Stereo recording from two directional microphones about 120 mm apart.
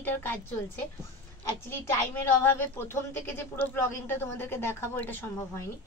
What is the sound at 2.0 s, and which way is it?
A woman's voice, 15° left (ahead or behind).